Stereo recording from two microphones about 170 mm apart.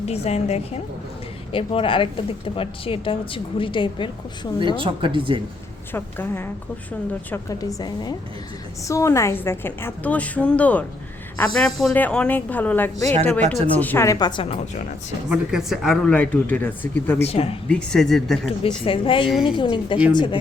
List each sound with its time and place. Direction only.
0.1 s speech: 40° left (ahead or behind)
4.6 s speech: 30° right (ahead or behind)
5.9 s a woman's voice: 15° left (ahead or behind)
13.4 s speech: 40° right (ahead or behind)
13.7 s a woman's voice: 10° left (ahead or behind); by 14.4 s 25° left (ahead or behind)
14.4 s speech: 40° left (ahead or behind)
15.3 s a woman's voice: 5° right (ahead or behind)
17.2 s speech: 35° left (ahead or behind)
17.7 s speech: 5° left (ahead or behind)
18.9 s a woman's voice: 30° left (ahead or behind)